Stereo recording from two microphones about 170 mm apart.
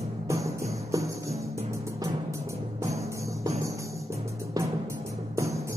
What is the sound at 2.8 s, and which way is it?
Music, 20° right (ahead or behind).